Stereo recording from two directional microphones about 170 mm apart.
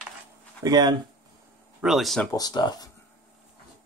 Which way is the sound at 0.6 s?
25° right (ahead or behind).